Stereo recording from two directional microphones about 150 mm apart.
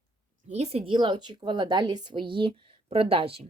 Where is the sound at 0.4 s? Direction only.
45° right (ahead or behind).